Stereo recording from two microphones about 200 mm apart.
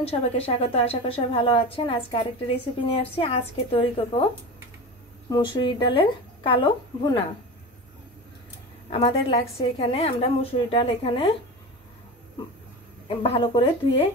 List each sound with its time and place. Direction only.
0.1 s a woman's voice: 30° left (ahead or behind)
5.3 s a woman's voice: 25° left (ahead or behind)
8.9 s a woman's voice: 30° left (ahead or behind)
13.1 s a woman's voice: 25° left (ahead or behind)